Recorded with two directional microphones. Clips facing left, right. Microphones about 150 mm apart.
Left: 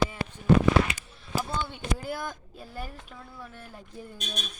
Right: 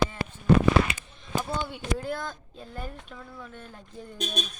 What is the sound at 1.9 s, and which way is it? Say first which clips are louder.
Speech: right 2 dB; 5° left (ahead or behind).